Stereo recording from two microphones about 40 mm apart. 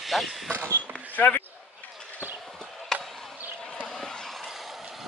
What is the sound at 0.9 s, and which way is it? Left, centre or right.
Basketball bounce, left.